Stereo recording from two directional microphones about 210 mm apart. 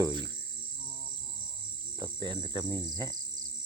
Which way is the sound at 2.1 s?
20° right (ahead or behind).